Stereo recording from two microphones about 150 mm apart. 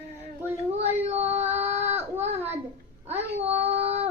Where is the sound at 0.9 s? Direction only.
45° right (ahead or behind).